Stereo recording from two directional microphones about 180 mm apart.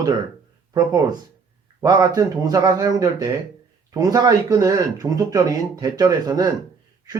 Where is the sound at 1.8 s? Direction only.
20° right (ahead or behind).